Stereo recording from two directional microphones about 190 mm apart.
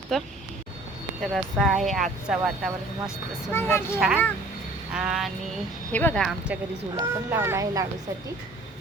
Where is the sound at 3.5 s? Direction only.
15° left (ahead or behind).